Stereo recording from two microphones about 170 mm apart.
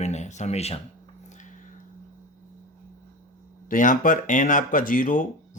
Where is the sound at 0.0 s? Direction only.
40° left (ahead or behind).